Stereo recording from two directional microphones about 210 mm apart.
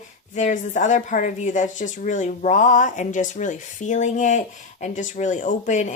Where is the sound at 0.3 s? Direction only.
35° left (ahead or behind).